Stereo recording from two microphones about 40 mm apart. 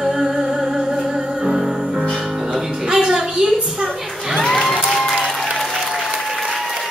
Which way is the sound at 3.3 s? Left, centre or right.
Centre.